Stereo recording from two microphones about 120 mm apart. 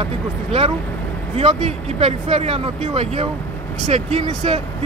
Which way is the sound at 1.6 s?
60° right (ahead or behind).